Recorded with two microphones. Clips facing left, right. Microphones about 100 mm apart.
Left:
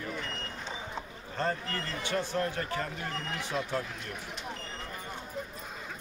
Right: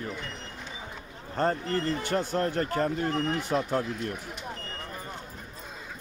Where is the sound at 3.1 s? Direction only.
25° right (ahead or behind).